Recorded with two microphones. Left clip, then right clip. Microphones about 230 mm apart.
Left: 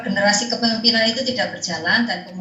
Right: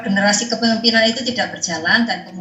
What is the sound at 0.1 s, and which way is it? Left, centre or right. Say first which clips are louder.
Speech: right 1 dB; right.